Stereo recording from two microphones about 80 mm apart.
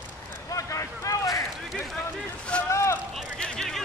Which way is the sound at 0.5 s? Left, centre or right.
Left.